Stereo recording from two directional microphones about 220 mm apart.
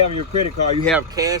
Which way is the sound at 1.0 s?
15° right (ahead or behind).